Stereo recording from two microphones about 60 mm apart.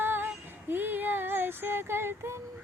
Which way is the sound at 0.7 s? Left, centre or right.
Right.